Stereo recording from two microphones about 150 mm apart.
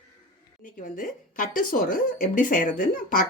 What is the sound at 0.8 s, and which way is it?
A woman's voice, 65° left (ahead or behind).